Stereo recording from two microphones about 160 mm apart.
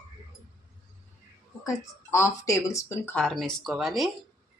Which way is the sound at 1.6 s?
20° left (ahead or behind).